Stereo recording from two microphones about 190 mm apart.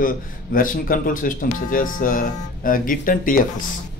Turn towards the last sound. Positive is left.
turn(degrees=45)  # may be behind; listen again after turning